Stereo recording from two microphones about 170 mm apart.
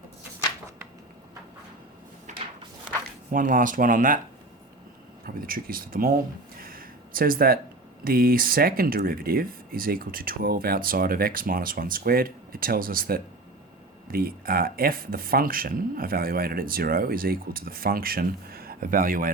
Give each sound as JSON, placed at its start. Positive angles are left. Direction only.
{"t": 3.3, "sound": "speech", "side_deg": -55}
{"t": 5.2, "sound": "speech", "side_deg": -60}
{"t": 6.6, "sound": "a sound", "side_deg": -60}
{"t": 8.0, "sound": "speech", "side_deg": -60}